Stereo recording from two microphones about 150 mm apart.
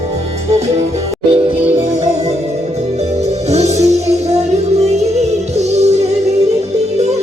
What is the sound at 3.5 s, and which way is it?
Music, 45° right (ahead or behind).